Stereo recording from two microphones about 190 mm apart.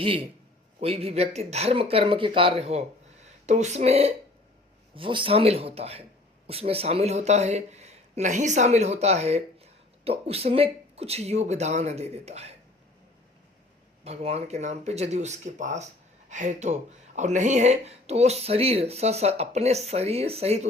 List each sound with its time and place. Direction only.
0.0 s a man's voice: 30° right (ahead or behind)
14.0 s speech: 35° right (ahead or behind)